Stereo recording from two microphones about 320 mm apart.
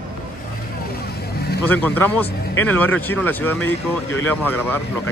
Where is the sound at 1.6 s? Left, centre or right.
Centre.